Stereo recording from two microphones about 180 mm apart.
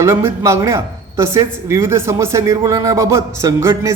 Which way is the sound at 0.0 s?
15° right (ahead or behind).